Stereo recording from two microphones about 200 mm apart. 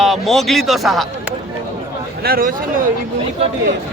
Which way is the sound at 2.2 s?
50° right (ahead or behind).